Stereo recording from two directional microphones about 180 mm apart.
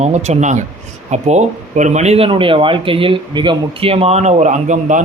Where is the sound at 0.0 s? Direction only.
40° right (ahead or behind).